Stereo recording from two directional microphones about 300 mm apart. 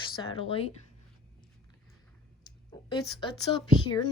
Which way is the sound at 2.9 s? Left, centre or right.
Centre.